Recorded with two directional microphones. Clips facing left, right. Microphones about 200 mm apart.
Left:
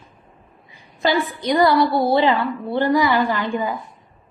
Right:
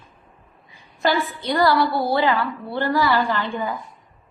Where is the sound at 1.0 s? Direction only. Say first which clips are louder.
Left 2 dB; 15° left (ahead or behind).